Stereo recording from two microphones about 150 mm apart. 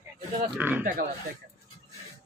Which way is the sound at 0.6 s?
10° right (ahead or behind).